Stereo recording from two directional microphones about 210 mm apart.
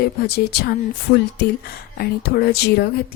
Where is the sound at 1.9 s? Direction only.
50° left (ahead or behind).